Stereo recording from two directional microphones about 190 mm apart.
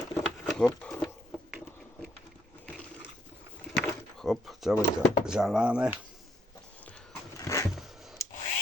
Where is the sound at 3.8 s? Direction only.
Centre (ahead or behind).